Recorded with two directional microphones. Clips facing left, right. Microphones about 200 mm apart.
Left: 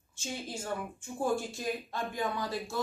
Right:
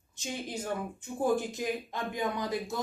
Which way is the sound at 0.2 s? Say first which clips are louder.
Right 2 dB; 15° right (ahead or behind).